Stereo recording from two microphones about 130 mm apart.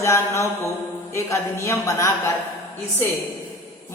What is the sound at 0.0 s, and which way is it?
A woman's voice, 20° left (ahead or behind).